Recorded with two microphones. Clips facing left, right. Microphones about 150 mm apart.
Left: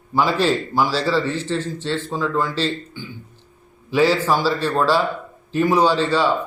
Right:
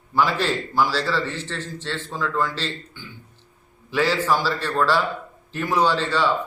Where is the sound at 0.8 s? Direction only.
15° left (ahead or behind).